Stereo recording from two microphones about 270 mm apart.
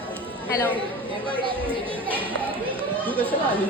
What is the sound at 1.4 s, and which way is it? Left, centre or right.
Speech, centre.